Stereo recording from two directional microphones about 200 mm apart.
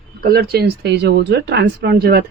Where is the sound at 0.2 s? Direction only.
50° right (ahead or behind).